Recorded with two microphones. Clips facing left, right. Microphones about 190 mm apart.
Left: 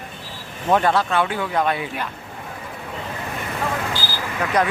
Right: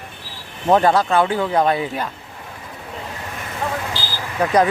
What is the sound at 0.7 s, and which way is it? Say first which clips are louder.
Speech: right 3 dB; 35° right (ahead or behind).